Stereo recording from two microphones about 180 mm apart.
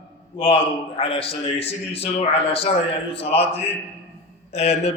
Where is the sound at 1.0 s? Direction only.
30° left (ahead or behind).